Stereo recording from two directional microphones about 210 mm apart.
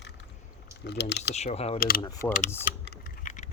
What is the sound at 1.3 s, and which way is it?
Speech, 30° left (ahead or behind).